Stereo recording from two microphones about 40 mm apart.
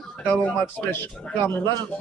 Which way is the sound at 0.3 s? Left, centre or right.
Left.